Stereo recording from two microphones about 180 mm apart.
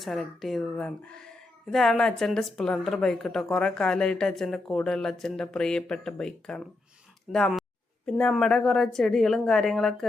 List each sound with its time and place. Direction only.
0.0 s a woman's voice: centre (ahead or behind)